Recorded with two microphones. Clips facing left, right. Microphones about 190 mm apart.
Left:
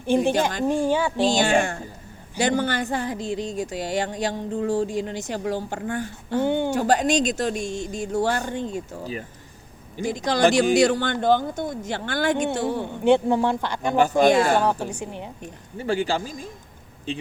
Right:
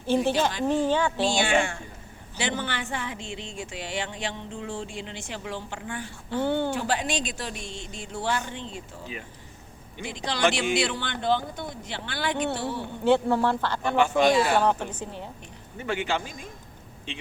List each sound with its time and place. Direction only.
0.0 s speech: 15° left (ahead or behind)
1.3 s a sound: 40° left (ahead or behind)
6.4 s speech: 15° left (ahead or behind)
6.7 s speech: 45° left (ahead or behind)
13.1 s speech: 15° left (ahead or behind)
13.9 s speech: 40° left (ahead or behind)
14.6 s speech: 10° left (ahead or behind)
15.8 s a sound: 35° left (ahead or behind)